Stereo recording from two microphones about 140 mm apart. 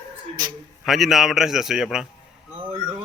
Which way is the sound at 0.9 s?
Centre (ahead or behind).